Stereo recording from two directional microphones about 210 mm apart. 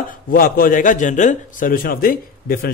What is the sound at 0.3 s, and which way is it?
A man's voice, 45° left (ahead or behind).